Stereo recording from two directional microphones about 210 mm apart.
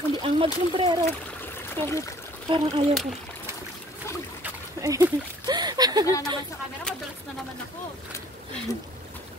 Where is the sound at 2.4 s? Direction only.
25° right (ahead or behind).